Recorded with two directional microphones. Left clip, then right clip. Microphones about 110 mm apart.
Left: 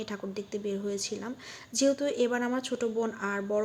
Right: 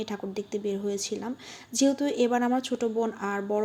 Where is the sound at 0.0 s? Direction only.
25° right (ahead or behind).